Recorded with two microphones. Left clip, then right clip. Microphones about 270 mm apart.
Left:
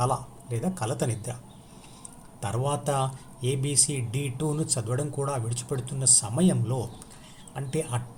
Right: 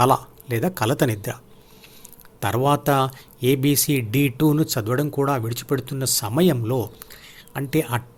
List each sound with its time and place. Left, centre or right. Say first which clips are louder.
0.0 s a man's voice: right 10 dB; right
2.4 s a man's voice: right 10 dB; right